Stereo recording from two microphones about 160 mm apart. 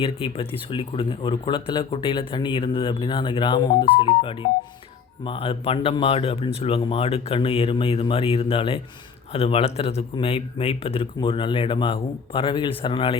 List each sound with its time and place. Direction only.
0.0 s speech: 35° left (ahead or behind)